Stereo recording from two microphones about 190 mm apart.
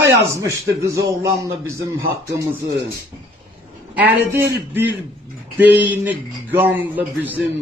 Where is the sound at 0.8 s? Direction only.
15° right (ahead or behind).